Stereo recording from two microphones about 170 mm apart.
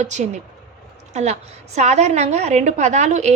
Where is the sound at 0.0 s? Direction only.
45° right (ahead or behind).